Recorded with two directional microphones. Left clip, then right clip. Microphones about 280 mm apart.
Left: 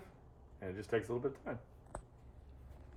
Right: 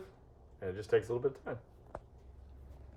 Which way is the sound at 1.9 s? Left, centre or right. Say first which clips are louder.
Right 2 dB; right.